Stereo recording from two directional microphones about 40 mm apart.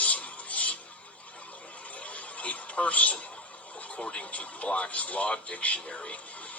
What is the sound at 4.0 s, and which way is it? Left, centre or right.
Speech, left.